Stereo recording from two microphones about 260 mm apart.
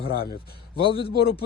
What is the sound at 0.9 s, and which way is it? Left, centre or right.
Speech, centre.